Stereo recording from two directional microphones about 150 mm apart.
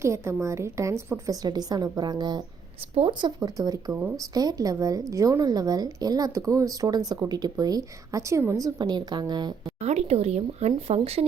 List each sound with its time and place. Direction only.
0.0 s speech: 20° right (ahead or behind)
9.8 s speech: 45° right (ahead or behind)